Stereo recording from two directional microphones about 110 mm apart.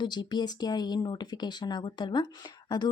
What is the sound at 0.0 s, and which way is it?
Speech, 40° left (ahead or behind).